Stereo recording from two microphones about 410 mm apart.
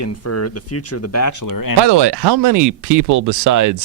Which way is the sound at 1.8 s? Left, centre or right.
Right.